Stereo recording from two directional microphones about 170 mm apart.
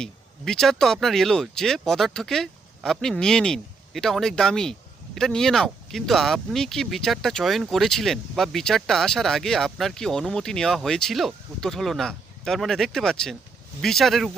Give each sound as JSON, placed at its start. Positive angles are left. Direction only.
{"t": 0.0, "sound": "speech", "side_deg": 5}